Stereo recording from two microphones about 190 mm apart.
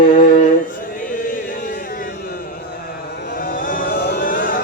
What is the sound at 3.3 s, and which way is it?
Chant, 45° left (ahead or behind).